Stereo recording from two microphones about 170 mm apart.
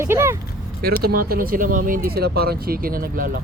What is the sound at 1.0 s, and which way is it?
Speech, 60° right (ahead or behind).